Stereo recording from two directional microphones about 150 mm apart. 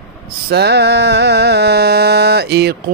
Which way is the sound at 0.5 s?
90° right.